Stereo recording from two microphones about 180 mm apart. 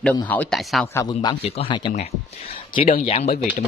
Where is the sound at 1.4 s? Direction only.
35° left (ahead or behind).